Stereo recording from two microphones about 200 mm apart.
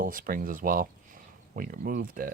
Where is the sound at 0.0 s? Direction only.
45° right (ahead or behind).